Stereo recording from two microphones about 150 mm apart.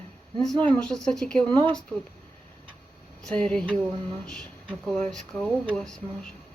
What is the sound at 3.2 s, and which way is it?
Speech, 5° left (ahead or behind).